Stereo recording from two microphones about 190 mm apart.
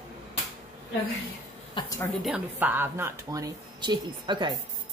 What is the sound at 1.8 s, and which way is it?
Speech, 20° left (ahead or behind).